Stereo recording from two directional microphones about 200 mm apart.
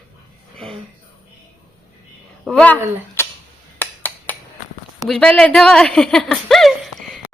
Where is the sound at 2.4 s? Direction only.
5° left (ahead or behind).